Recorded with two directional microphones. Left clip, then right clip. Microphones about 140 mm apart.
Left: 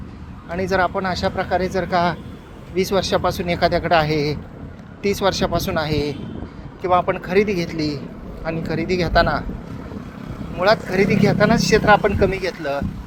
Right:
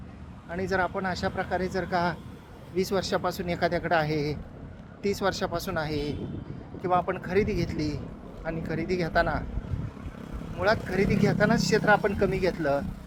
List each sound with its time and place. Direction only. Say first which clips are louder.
0.5 s speech: left 8 dB; 20° right (ahead or behind)
10.6 s speech: left 9 dB; 20° right (ahead or behind)